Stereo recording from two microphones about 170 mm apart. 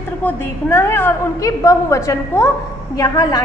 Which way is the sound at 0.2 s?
10° left (ahead or behind).